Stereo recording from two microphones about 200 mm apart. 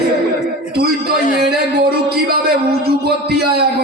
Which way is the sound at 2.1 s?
50° right (ahead or behind).